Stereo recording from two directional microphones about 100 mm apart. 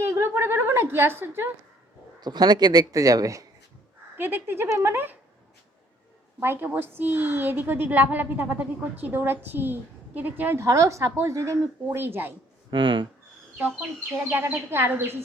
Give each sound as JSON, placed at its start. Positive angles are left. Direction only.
{"t": 0.0, "sound": "a woman's voice", "side_deg": -25}
{"t": 2.2, "sound": "speech", "side_deg": -45}
{"t": 4.2, "sound": "a woman's voice", "side_deg": -20}
{"t": 6.4, "sound": "a woman's voice", "side_deg": -20}
{"t": 12.7, "sound": "speech", "side_deg": -55}
{"t": 13.6, "sound": "a woman's voice", "side_deg": -15}